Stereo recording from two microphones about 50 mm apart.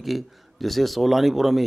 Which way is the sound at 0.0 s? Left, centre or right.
Centre.